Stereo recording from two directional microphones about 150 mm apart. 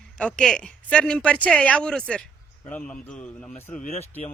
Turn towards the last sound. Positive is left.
turn(degrees=45)  # may be behind; listen again after turning